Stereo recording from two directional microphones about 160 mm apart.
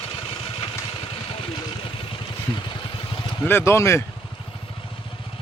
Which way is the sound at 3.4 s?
15° left (ahead or behind).